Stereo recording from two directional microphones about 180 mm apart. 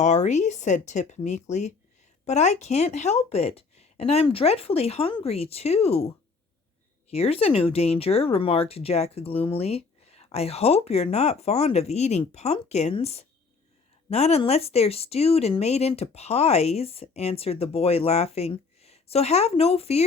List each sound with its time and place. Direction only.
0.0 s speech: 40° left (ahead or behind)